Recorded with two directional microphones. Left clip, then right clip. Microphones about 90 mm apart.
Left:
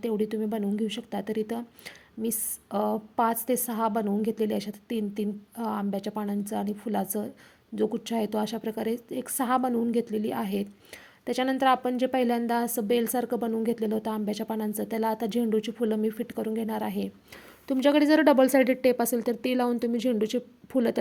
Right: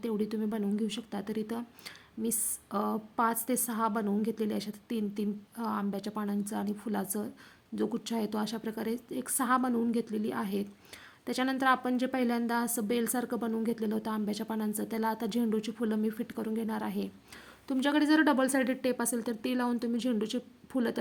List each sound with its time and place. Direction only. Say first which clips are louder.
0.0 s a woman's voice: left 5 dB; 30° left (ahead or behind)
17.7 s a woman's voice: left 6 dB; 50° left (ahead or behind)